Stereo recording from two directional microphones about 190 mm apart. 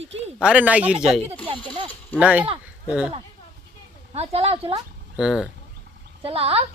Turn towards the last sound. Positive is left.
turn(degrees=-30)  # may be behind; listen again after turning